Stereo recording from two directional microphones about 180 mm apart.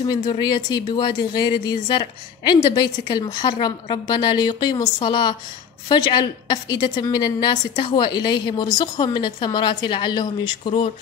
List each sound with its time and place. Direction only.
0.0 s a woman's voice: 25° left (ahead or behind)